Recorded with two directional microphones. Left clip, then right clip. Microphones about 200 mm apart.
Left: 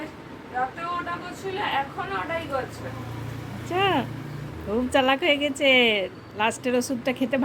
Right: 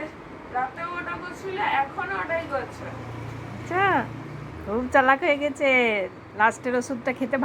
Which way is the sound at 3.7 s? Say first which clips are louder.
Right 1 dB; 20° left (ahead or behind).